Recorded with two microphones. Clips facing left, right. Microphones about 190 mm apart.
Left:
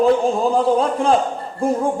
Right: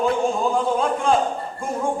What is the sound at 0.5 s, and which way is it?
A man's voice, 35° left (ahead or behind).